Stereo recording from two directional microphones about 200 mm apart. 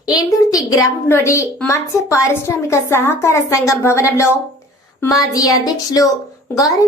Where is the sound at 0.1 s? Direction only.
20° left (ahead or behind).